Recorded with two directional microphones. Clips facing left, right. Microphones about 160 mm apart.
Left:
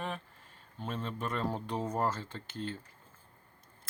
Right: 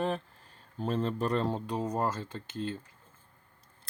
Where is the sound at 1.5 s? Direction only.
15° right (ahead or behind).